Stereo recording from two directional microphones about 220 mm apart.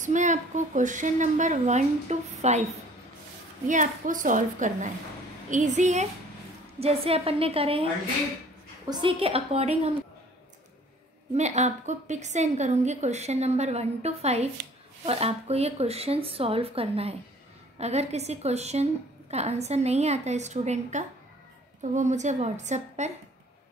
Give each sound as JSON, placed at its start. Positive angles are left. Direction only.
{"t": 0.0, "sound": "a woman's voice", "side_deg": -35}
{"t": 3.6, "sound": "a woman's voice", "side_deg": -35}
{"t": 8.8, "sound": "speech", "side_deg": -20}
{"t": 11.3, "sound": "a woman's voice", "side_deg": -30}